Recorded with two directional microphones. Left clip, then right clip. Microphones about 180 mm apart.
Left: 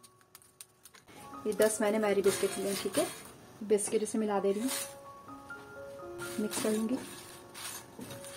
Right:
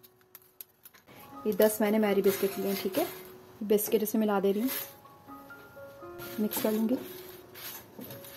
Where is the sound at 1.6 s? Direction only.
40° right (ahead or behind).